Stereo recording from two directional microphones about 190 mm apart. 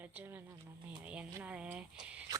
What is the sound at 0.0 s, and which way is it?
Speech, 10° right (ahead or behind).